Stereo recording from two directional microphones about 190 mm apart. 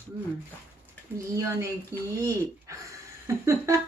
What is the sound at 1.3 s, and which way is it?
Speech, 15° right (ahead or behind).